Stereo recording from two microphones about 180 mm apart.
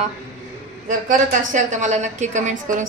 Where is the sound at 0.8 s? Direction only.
45° right (ahead or behind).